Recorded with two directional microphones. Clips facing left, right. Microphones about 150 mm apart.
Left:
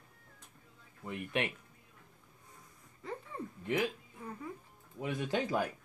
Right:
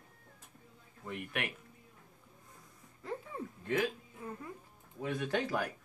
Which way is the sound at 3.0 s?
Centre (ahead or behind).